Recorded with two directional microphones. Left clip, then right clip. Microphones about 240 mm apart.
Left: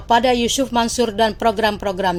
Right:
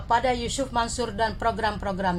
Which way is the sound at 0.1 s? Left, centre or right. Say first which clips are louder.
Left 8 dB; left.